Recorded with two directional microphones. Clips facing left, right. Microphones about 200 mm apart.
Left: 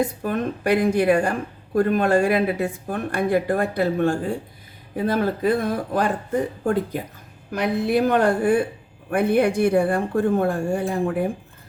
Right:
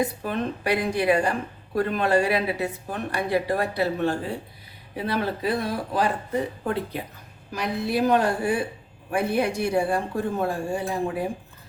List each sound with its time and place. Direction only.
0.2 s speech: 50° left (ahead or behind)
7.5 s a woman's voice: 55° left (ahead or behind)